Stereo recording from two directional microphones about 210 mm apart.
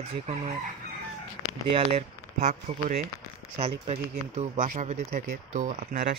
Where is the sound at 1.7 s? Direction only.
25° right (ahead or behind).